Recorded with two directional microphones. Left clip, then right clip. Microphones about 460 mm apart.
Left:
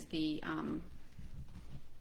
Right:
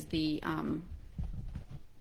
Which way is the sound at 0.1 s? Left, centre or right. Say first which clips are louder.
Right 4 dB; right.